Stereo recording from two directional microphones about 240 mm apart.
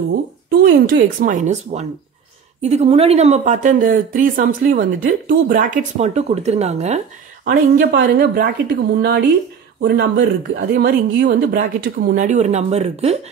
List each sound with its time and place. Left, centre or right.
0.5 s speech: right
7.4 s speech: right
9.8 s speech: right